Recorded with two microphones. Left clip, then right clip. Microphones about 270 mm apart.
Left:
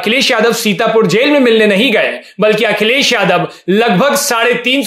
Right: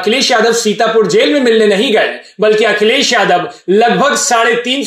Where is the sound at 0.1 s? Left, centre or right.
Left.